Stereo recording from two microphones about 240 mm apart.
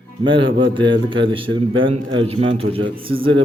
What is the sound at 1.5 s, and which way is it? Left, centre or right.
Speech, right.